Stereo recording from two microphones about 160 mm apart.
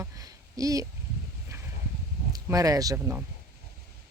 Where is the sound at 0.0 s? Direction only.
20° right (ahead or behind).